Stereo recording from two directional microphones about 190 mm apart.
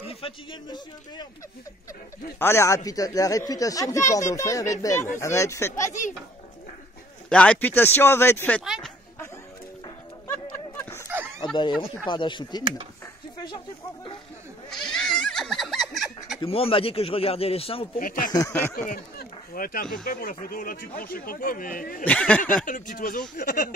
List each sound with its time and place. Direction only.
0.1 s speech: 25° left (ahead or behind)
2.3 s speech: 15° left (ahead or behind)
7.2 s speech: 5° left (ahead or behind)
8.6 s speech: 5° right (ahead or behind)
10.2 s a sound: 15° left (ahead or behind)
11.5 s speech: 25° left (ahead or behind)
14.7 s goat: 5° left (ahead or behind)
16.3 s speech: 30° left (ahead or behind)
17.9 s speech: 50° left (ahead or behind)
18.3 s speech: 15° left (ahead or behind)
18.9 s speech: 50° left (ahead or behind)
22.0 s speech: 5° left (ahead or behind)
22.7 s speech: 45° left (ahead or behind)